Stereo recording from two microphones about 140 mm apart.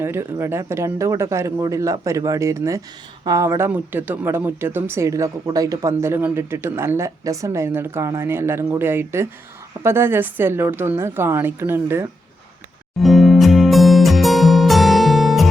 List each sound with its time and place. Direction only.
0.0 s a woman's voice: 15° right (ahead or behind)
13.0 s music: centre (ahead or behind)